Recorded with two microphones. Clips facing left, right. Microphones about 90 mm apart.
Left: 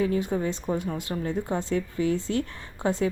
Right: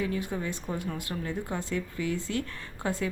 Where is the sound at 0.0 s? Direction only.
30° left (ahead or behind).